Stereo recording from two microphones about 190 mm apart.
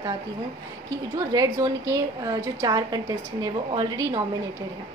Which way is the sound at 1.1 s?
20° right (ahead or behind).